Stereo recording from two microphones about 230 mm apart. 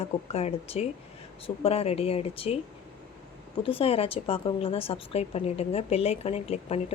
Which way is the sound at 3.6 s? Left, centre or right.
Left.